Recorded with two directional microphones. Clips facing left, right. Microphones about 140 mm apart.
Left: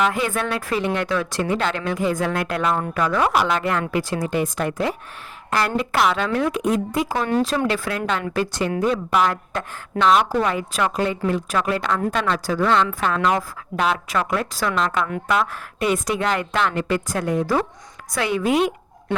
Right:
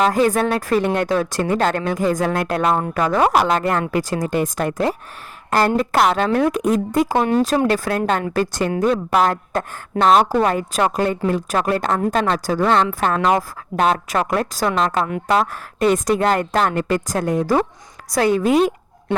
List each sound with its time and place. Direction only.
0.0 s a woman's voice: 40° right (ahead or behind)
7.1 s speech: 25° right (ahead or behind)
7.4 s speech: 45° right (ahead or behind)
9.1 s a woman's voice: 40° right (ahead or behind)